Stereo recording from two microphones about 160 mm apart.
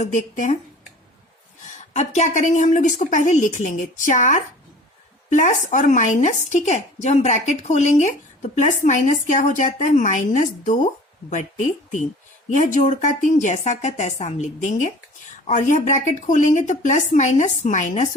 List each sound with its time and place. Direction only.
0.0 s speech: 50° left (ahead or behind)
1.9 s speech: 45° left (ahead or behind)